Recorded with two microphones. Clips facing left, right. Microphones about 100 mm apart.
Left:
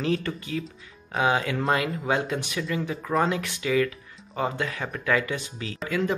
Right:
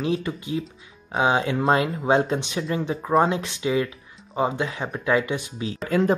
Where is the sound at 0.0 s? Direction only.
15° right (ahead or behind).